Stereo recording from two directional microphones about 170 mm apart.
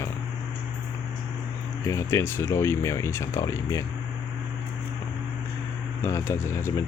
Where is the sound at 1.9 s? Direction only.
15° left (ahead or behind).